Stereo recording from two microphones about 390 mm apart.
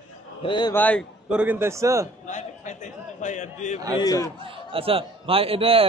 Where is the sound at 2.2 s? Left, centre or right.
Centre.